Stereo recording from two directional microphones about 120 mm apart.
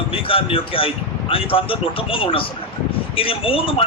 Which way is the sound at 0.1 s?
50° left (ahead or behind).